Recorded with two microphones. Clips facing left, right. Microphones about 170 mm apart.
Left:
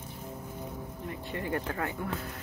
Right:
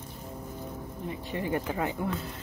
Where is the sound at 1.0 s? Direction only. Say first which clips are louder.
Right 3 dB; 20° right (ahead or behind).